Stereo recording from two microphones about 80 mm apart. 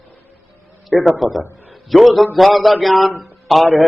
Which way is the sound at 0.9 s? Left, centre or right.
Centre.